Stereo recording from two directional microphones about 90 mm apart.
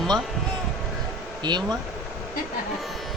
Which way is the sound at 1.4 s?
55° right (ahead or behind).